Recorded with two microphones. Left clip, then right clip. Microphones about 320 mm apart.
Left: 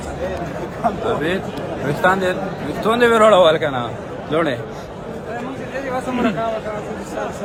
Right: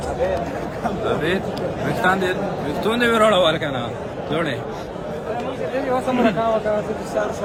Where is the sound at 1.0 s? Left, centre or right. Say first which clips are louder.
Left 1 dB; centre.